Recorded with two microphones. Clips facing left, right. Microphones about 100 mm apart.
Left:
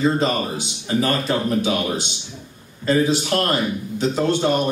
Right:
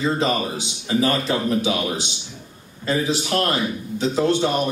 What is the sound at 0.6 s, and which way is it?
Speech, 45° left (ahead or behind).